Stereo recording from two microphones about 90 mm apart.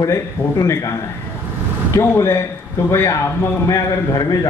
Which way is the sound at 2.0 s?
30° left (ahead or behind).